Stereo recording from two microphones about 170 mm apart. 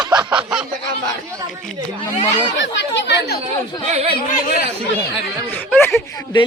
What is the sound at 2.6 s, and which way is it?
Speech, 90° left.